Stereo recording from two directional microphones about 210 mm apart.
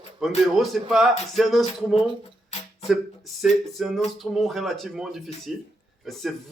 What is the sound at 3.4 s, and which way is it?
Speech, centre (ahead or behind).